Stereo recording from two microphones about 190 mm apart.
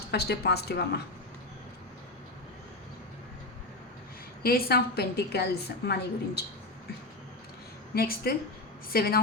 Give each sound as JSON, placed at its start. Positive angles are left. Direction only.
{"t": 0.1, "sound": "a woman's voice", "side_deg": 60}
{"t": 4.4, "sound": "a woman's voice", "side_deg": 55}
{"t": 7.9, "sound": "speech", "side_deg": 55}